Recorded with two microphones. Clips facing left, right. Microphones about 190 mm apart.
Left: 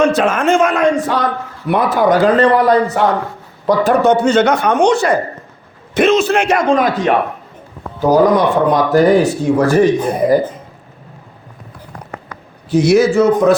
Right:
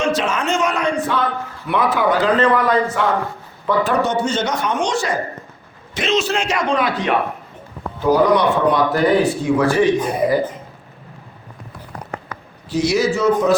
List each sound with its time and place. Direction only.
0.0 s speech: 55° left (ahead or behind)
0.8 s speech: 90° left
1.0 s a man's voice: 45° left (ahead or behind)
3.7 s speech: 50° left (ahead or behind)
8.1 s speech: 45° left (ahead or behind)
12.7 s speech: 55° left (ahead or behind)